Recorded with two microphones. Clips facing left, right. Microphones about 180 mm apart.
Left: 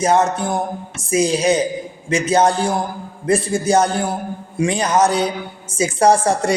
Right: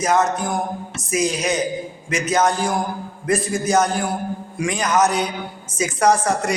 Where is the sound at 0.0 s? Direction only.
30° left (ahead or behind).